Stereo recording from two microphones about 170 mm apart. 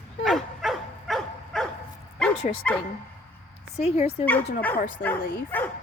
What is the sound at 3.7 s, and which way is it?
Speech, 40° left (ahead or behind).